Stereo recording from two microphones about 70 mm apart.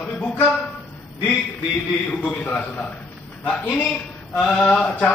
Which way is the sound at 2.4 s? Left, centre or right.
Left.